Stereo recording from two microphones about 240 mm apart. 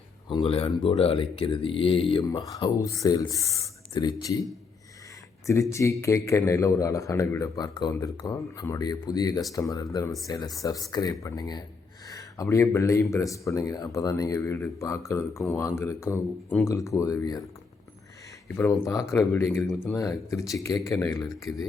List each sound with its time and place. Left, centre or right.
0.3 s speech: left
5.5 s speech: centre
18.4 s speech: centre
21.5 s speech: centre